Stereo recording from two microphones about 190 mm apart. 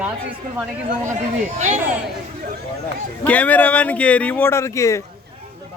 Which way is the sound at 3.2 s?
10° left (ahead or behind).